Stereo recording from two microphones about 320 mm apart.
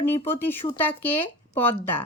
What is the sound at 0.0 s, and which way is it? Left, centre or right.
Speech, centre.